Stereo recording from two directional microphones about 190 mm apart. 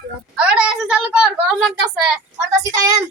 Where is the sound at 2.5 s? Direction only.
20° right (ahead or behind).